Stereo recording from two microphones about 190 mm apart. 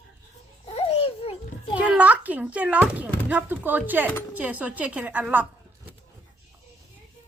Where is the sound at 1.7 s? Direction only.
5° right (ahead or behind).